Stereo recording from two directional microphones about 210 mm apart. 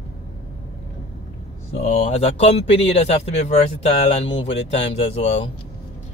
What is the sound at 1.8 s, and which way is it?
A man's voice, 30° left (ahead or behind).